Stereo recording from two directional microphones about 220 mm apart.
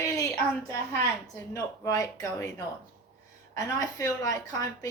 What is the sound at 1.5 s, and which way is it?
A woman's voice, 15° left (ahead or behind).